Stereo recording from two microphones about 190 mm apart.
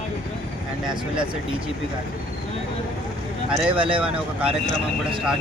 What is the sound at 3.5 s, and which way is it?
Speech, 5° right (ahead or behind).